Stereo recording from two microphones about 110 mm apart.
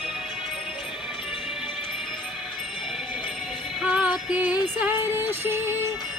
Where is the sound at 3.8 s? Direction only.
5° right (ahead or behind).